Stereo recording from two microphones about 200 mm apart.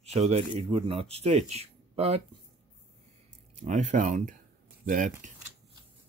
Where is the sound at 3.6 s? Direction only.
35° right (ahead or behind).